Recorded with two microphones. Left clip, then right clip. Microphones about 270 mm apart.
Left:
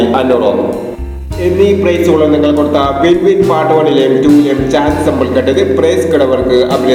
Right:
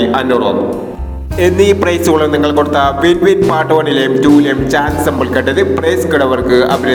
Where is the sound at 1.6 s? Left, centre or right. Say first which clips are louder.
Left 3 dB; right.